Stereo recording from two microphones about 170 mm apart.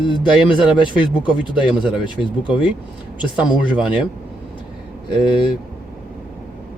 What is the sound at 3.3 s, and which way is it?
Speech, 5° right (ahead or behind).